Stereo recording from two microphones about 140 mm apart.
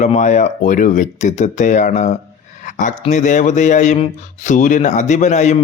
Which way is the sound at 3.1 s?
60° left (ahead or behind).